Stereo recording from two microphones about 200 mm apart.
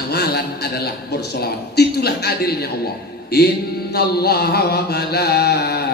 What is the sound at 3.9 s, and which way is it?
A man's voice, 50° left (ahead or behind).